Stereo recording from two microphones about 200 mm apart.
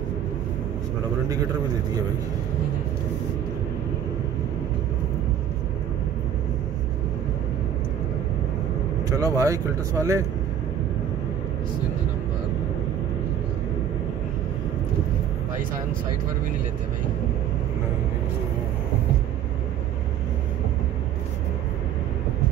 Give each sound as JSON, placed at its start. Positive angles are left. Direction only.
{"t": 9.1, "sound": "speech", "side_deg": -15}